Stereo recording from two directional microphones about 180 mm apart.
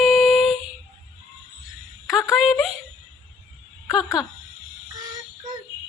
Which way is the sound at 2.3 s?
Centre (ahead or behind).